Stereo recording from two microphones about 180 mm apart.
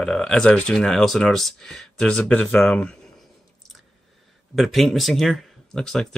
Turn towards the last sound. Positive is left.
turn(degrees=5)  # may be behind; listen again after turning